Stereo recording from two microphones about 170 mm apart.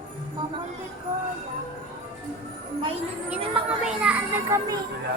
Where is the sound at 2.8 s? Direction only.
35° right (ahead or behind).